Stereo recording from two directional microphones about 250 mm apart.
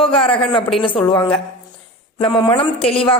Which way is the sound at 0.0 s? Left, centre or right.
Left.